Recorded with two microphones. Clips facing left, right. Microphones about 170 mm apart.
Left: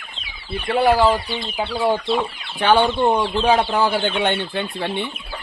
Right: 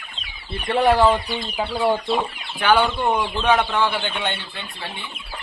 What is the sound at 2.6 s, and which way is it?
Speech, 30° left (ahead or behind).